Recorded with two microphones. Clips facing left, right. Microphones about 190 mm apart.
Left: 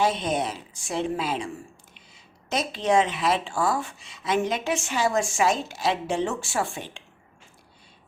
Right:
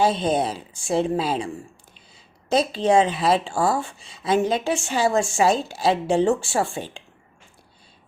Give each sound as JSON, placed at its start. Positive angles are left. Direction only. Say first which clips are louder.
{"t": 0.0, "sound": "a woman's voice", "louder": "right 4 dB", "side_deg": -30}
{"t": 2.5, "sound": "a woman's voice", "louder": "right 5 dB", "side_deg": -30}